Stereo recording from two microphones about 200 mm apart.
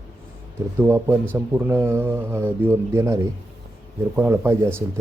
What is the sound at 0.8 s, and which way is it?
Speech, 10° right (ahead or behind).